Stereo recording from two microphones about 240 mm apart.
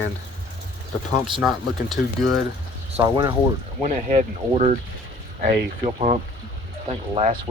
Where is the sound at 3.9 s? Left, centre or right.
Right.